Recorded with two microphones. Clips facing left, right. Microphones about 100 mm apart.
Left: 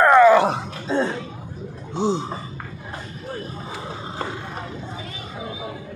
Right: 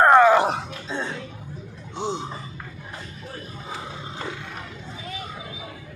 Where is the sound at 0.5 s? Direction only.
35° left (ahead or behind).